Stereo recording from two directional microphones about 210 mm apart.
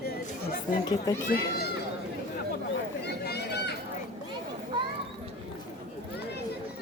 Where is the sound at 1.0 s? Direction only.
15° left (ahead or behind).